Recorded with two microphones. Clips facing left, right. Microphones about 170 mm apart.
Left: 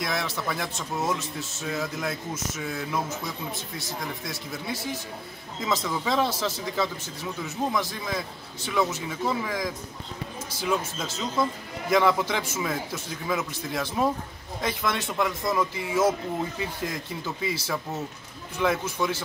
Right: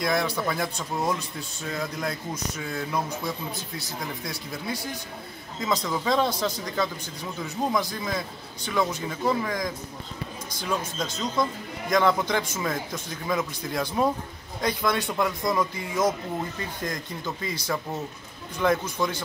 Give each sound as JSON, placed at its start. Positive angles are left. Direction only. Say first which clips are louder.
{"t": 0.0, "sound": "speech", "louder": "right 4 dB", "side_deg": 0}